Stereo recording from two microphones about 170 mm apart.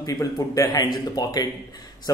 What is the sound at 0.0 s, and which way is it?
A man's voice, 20° left (ahead or behind).